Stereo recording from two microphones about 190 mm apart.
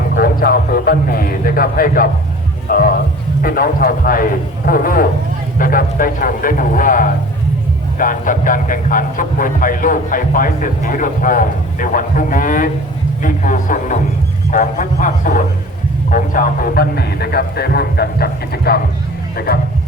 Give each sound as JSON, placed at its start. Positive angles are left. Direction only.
{"t": 0.1, "sound": "a man's voice", "side_deg": 50}